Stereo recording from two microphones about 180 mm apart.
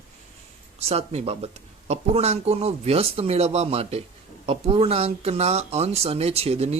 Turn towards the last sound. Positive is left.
turn(degrees=-35)  # may be behind; listen again after turning